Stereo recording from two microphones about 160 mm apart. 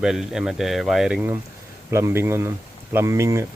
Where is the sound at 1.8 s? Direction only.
15° right (ahead or behind).